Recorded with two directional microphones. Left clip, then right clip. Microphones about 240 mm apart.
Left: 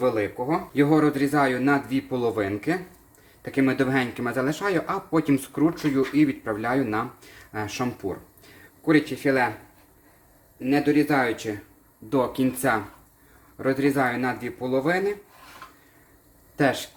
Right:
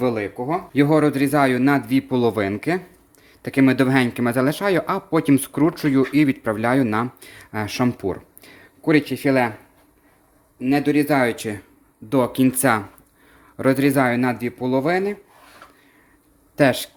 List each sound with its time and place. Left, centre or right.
0.0 s speech: right
10.6 s speech: right
16.6 s speech: right